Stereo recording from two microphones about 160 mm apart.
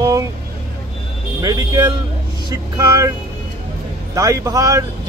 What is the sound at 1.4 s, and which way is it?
Speech, 25° right (ahead or behind).